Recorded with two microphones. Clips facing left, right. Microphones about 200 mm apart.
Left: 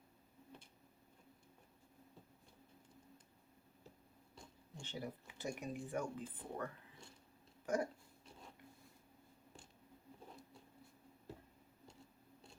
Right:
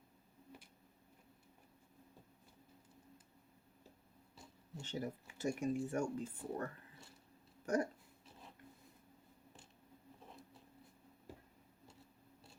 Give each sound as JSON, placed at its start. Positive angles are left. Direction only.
{"t": 4.8, "sound": "speech", "side_deg": -45}
{"t": 10.2, "sound": "writing", "side_deg": 0}